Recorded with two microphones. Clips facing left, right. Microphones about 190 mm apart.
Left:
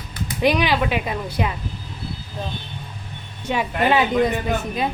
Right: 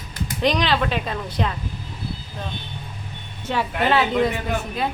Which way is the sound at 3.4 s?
15° left (ahead or behind).